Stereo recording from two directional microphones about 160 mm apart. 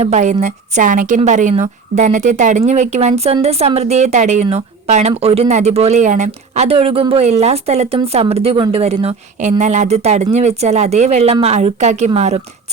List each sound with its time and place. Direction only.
0.0 s a woman's voice: 45° right (ahead or behind)